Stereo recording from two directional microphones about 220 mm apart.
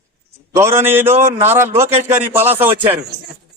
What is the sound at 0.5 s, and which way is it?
A man's voice, 10° right (ahead or behind).